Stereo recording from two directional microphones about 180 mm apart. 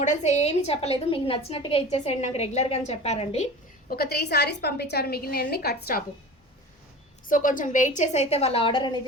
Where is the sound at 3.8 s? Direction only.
60° left (ahead or behind).